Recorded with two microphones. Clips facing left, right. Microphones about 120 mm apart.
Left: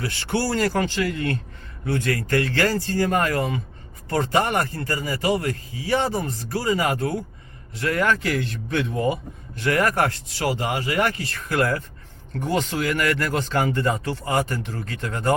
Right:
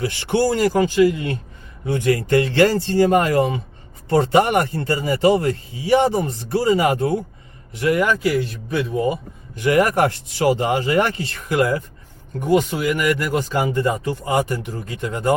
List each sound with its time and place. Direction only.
0.0 s speech: 20° right (ahead or behind)
9.6 s speech: 20° right (ahead or behind)